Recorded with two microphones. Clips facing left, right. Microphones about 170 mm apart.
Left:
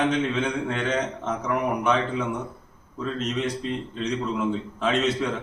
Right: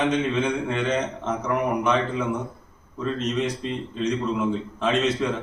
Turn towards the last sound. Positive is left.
turn(degrees=0)  # may be behind; listen again after turning